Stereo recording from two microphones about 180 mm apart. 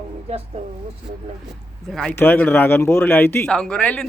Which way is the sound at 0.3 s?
35° right (ahead or behind).